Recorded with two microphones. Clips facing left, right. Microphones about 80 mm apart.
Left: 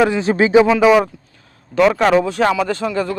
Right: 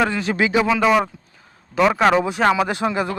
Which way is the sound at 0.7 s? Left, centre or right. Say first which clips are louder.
Left 5 dB; centre.